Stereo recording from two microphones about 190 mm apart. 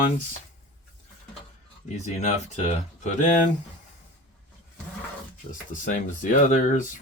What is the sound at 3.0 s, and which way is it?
Speech, 40° left (ahead or behind).